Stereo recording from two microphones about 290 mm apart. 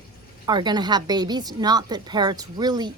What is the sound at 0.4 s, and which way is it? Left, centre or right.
A woman's voice, centre.